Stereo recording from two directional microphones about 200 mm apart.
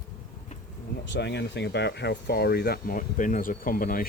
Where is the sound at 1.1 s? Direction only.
55° left (ahead or behind).